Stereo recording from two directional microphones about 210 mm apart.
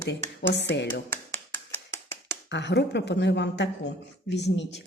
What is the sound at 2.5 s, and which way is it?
Speech, 55° left (ahead or behind).